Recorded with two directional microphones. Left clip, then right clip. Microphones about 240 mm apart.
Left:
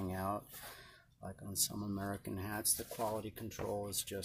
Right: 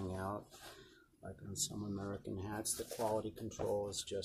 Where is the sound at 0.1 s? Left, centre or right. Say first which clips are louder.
Left 5 dB; left.